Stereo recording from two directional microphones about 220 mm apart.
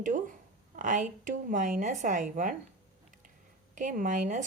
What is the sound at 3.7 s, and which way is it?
Speech, 35° right (ahead or behind).